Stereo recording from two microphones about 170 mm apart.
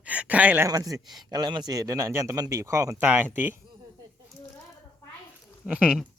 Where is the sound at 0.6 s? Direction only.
20° right (ahead or behind).